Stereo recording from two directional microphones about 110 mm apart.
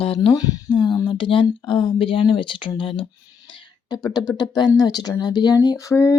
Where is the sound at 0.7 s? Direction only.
45° left (ahead or behind).